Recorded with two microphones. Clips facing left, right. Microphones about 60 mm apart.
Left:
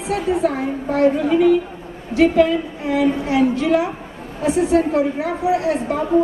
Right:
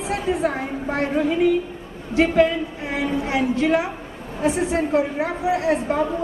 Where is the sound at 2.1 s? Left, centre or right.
Right.